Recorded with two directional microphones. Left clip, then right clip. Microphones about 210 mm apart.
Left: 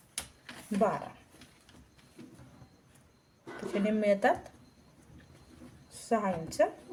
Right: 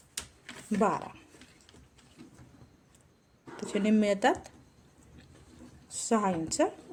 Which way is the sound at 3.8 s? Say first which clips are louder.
Even; 50° right (ahead or behind).